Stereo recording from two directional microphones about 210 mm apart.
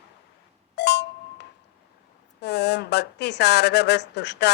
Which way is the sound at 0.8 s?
55° left (ahead or behind).